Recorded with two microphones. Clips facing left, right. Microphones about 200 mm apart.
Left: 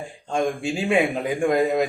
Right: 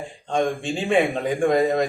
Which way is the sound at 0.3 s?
10° left (ahead or behind).